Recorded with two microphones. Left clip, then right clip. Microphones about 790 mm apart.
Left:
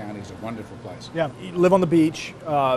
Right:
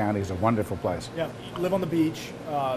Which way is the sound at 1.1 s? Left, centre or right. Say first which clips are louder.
Left 6 dB; left.